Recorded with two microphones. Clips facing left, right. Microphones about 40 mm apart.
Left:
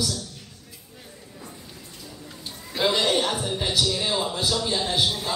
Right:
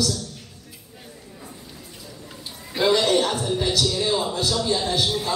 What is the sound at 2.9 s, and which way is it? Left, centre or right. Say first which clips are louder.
A man's voice: right 5 dB; centre.